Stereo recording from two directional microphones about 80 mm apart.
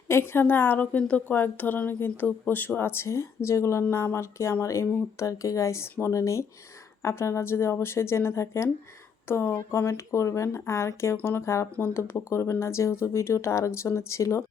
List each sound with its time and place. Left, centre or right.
0.1 s a woman's voice: left